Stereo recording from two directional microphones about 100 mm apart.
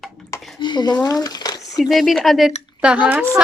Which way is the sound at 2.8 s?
10° right (ahead or behind).